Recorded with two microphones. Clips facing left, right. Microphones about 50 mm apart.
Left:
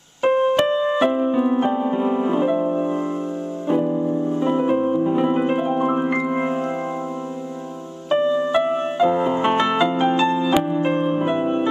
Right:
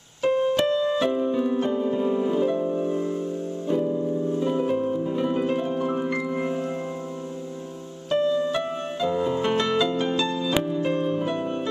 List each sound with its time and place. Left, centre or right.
0.2 s keyboard: left
0.6 s piano: left
3.6 s music: left
8.1 s music: left